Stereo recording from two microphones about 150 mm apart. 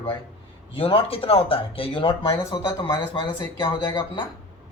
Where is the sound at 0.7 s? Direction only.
35° left (ahead or behind).